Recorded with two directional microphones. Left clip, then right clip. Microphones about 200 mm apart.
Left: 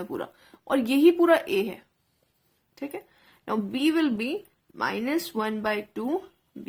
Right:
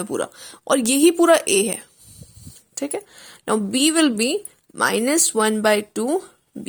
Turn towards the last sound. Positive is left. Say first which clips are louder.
# right 9 dB
turn(degrees=-35)  # may be behind; listen again after turning